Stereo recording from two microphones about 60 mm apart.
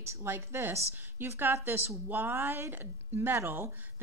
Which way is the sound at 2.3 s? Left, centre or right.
Right.